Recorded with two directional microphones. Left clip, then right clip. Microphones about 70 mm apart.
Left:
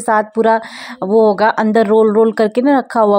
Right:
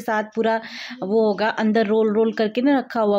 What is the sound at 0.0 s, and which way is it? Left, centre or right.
Speech, left.